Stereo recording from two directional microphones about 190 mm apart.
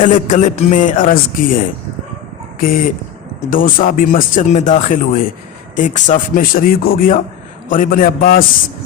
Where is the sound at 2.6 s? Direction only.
50° left (ahead or behind).